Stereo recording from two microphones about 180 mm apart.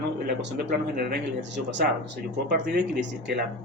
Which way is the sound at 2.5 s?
70° right (ahead or behind).